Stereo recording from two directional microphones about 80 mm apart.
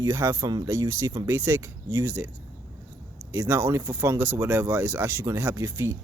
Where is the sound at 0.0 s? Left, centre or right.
Right.